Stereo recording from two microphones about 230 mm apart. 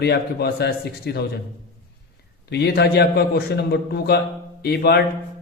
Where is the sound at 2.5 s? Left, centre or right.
Left.